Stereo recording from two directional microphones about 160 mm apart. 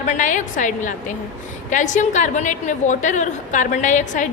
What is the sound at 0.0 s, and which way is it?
A woman's voice, 50° left (ahead or behind).